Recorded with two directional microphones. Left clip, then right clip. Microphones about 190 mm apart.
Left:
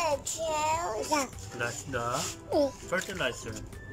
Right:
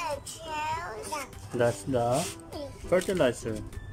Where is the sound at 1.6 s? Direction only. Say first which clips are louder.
Right 7 dB; 30° right (ahead or behind).